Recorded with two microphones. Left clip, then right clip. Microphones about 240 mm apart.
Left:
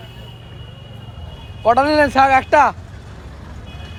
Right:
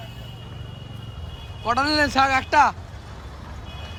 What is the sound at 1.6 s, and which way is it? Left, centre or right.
Speech, centre.